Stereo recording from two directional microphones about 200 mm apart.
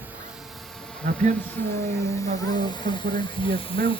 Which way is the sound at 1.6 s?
15° left (ahead or behind).